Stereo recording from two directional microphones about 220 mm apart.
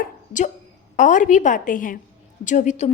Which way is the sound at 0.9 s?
35° left (ahead or behind).